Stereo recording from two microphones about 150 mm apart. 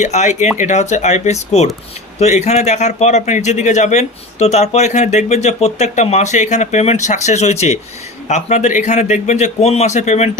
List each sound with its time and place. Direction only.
0.0 s speech: 50° left (ahead or behind)